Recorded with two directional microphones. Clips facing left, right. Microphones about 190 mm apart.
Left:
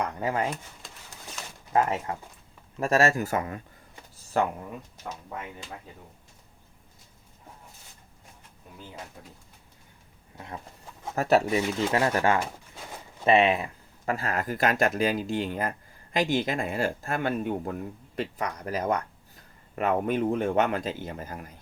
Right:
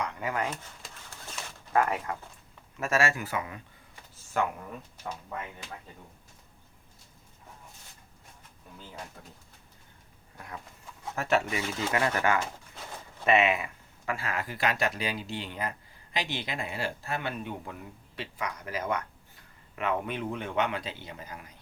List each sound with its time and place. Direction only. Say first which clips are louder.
0.0 s speech: left 4 dB; 35° left (ahead or behind)
1.7 s speech: left 2 dB; 25° left (ahead or behind)
10.3 s a sound: left 3 dB; 25° left (ahead or behind)
11.1 s speech: left 6 dB; 35° left (ahead or behind)